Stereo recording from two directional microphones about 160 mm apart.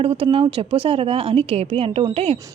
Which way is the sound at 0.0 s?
35° right (ahead or behind).